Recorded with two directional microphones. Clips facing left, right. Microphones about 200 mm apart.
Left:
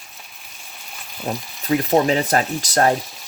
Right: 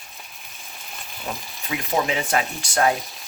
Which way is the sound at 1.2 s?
40° left (ahead or behind).